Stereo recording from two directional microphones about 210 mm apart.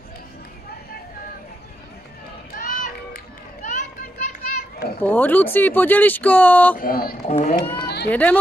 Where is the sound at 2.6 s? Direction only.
40° left (ahead or behind).